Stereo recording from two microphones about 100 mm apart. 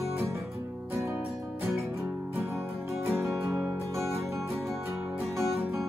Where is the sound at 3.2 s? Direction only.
25° right (ahead or behind).